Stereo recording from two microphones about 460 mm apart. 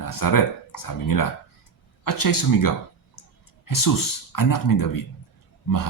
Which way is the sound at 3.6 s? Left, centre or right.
Left.